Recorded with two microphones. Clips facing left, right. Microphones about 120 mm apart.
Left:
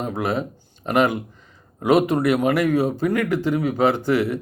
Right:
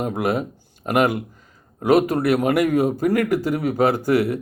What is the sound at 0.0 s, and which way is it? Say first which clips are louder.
A man's voice: right 2 dB; 10° right (ahead or behind).